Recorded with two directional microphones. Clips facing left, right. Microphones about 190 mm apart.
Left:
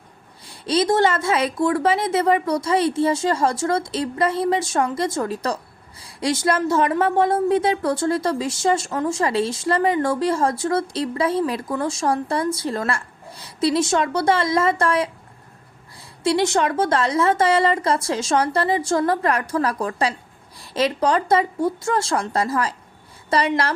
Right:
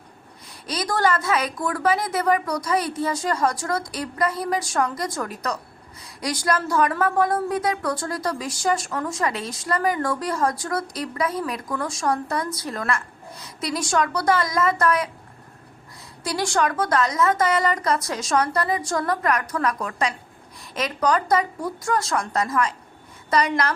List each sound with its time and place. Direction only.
0.4 s speech: 30° left (ahead or behind)
16.2 s speech: 25° left (ahead or behind)